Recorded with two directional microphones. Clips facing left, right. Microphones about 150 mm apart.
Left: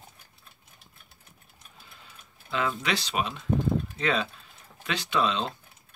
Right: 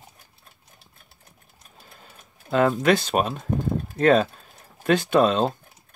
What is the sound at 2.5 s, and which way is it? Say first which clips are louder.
Speech: right 10 dB; 50° right (ahead or behind).